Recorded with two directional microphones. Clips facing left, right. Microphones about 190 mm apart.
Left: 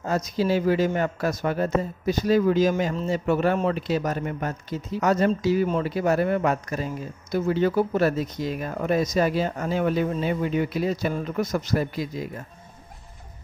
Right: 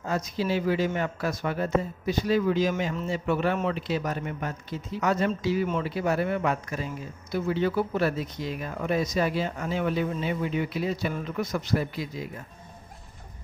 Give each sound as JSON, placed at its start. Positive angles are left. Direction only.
{"t": 0.0, "sound": "a man's voice", "side_deg": 40}